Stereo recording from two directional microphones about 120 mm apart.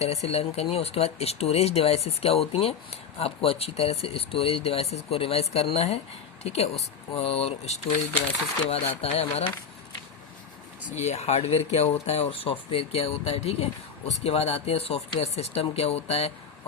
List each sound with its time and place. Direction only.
0.0 s speech: 60° left (ahead or behind)
10.8 s speech: 70° left (ahead or behind)